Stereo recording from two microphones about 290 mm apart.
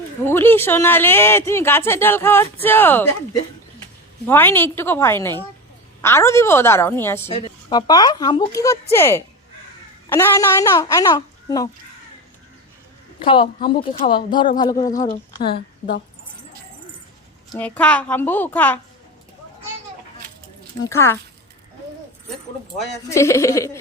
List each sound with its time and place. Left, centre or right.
0.3 s speech: centre
4.3 s speech: centre
13.2 s speech: centre
14.9 s speech: left
17.5 s a woman's voice: centre
20.8 s speech: centre
22.8 s speech: centre